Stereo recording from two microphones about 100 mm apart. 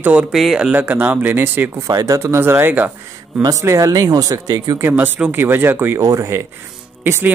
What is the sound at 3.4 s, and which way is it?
Speech, 30° right (ahead or behind).